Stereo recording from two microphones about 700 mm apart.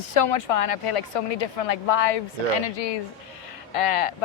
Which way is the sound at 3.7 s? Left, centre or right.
Left.